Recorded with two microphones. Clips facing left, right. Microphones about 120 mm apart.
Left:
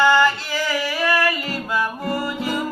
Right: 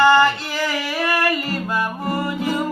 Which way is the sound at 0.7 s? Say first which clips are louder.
Left 3 dB; 20° right (ahead or behind).